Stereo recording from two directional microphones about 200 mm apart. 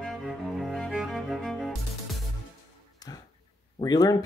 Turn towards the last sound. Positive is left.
turn(degrees=20)  # may be behind; listen again after turning